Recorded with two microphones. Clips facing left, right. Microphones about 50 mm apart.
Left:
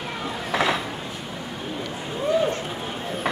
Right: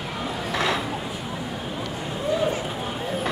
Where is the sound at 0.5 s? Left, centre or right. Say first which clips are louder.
Left 2 dB; centre.